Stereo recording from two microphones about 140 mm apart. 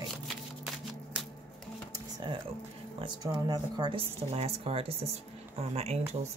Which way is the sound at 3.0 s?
30° right (ahead or behind).